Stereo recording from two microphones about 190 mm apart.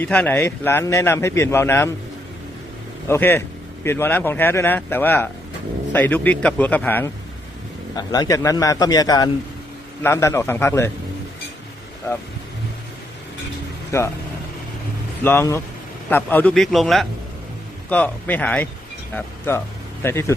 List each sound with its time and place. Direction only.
0.0 s a man's voice: 10° left (ahead or behind)
3.1 s a man's voice: 10° left (ahead or behind)
7.9 s a man's voice: 20° left (ahead or behind)
13.9 s a man's voice: 15° left (ahead or behind)
15.2 s a man's voice: 10° left (ahead or behind)